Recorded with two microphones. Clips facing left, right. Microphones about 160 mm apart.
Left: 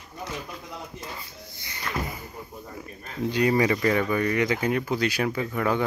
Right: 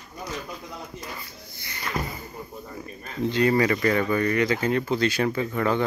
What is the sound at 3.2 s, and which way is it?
Speech, 10° left (ahead or behind).